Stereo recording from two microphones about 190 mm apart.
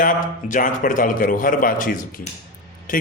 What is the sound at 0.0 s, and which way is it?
A man's voice, 45° left (ahead or behind).